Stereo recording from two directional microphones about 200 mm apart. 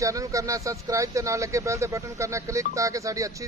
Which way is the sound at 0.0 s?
15° right (ahead or behind).